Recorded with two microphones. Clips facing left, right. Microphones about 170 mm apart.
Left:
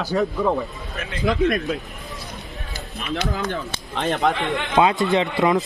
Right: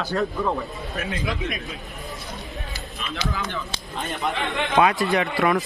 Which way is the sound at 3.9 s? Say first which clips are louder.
Left 7 dB; 85° left.